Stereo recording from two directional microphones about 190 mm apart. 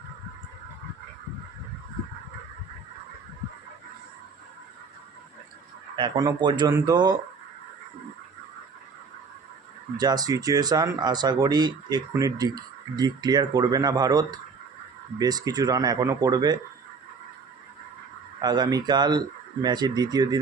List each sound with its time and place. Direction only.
6.0 s speech: 20° right (ahead or behind)
10.0 s speech: 20° right (ahead or behind)
18.4 s speech: 20° right (ahead or behind)